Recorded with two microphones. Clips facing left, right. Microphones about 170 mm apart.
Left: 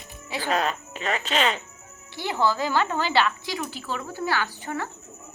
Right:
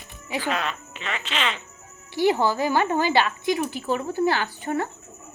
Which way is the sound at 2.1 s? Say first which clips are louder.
Right 4 dB; 15° right (ahead or behind).